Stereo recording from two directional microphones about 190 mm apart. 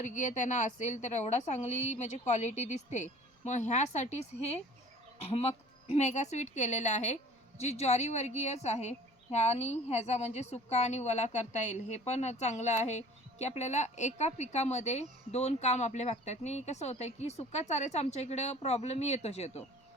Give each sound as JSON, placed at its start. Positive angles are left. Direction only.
{"t": 0.0, "sound": "a woman's voice", "side_deg": 40}